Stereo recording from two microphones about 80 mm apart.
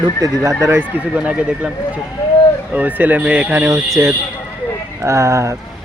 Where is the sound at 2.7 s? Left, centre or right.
Right.